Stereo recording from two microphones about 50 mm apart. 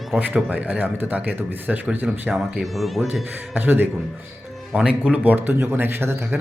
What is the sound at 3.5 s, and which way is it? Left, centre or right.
Speech, right.